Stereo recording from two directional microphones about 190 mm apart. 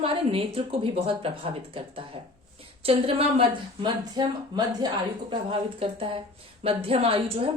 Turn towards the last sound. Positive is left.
turn(degrees=-30)  # may be behind; listen again after turning